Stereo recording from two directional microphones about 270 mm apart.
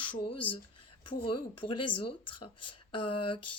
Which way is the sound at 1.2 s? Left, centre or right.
Centre.